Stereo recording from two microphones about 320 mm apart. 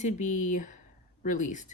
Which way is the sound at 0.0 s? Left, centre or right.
Left.